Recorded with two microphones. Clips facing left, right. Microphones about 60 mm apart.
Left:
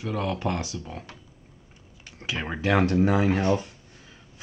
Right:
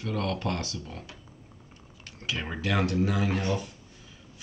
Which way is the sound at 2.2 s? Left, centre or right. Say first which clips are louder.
Left 2 dB; left.